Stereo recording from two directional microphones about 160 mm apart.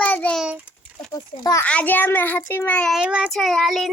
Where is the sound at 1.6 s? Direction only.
10° left (ahead or behind).